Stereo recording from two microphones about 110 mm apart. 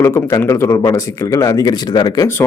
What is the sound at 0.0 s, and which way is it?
A man's voice, 25° left (ahead or behind).